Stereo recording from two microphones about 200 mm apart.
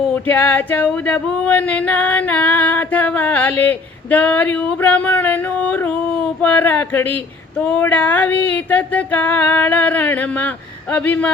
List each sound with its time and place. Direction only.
0.3 s female singing: 10° left (ahead or behind)